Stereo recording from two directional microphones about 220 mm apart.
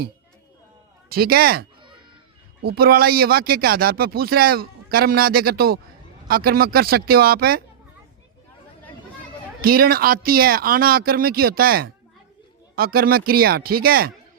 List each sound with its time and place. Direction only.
1.1 s speech: 45° right (ahead or behind)
2.6 s speech: 45° right (ahead or behind)
9.6 s speech: 40° right (ahead or behind)